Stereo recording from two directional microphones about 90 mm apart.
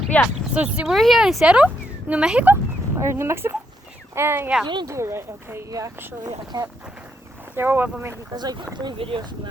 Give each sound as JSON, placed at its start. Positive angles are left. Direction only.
{"t": 0.1, "sound": "speech", "side_deg": 15}
{"t": 0.5, "sound": "speech", "side_deg": -15}
{"t": 0.9, "sound": "speech", "side_deg": 0}
{"t": 3.0, "sound": "speech", "side_deg": -30}
{"t": 4.6, "sound": "speech", "side_deg": -55}
{"t": 4.9, "sound": "speech", "side_deg": -30}
{"t": 7.5, "sound": "speech", "side_deg": -25}
{"t": 8.3, "sound": "speech", "side_deg": -45}
{"t": 9.0, "sound": "speech", "side_deg": -90}